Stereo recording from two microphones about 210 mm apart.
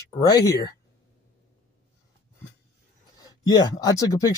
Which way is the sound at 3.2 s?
15° left (ahead or behind).